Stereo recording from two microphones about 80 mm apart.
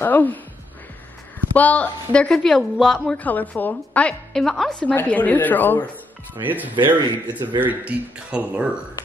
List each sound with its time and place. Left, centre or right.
0.0 s a woman's voice: left
1.5 s speech: centre
3.2 s a woman's voice: left
4.3 s a woman's voice: centre; by 5.9 s left
6.4 s speech: right
7.0 s a man's voice: right
7.6 s speech: centre